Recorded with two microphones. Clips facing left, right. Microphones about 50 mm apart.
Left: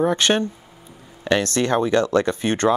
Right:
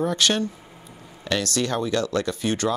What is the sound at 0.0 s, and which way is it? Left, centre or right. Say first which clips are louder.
Speech: left 4 dB; left.